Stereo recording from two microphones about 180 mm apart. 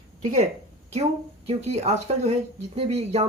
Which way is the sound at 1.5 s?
35° right (ahead or behind).